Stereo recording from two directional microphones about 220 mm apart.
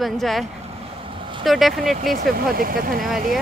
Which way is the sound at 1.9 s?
40° right (ahead or behind).